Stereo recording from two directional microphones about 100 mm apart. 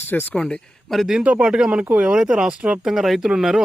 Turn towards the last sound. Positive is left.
turn(degrees=-5)  # may be behind; listen again after turning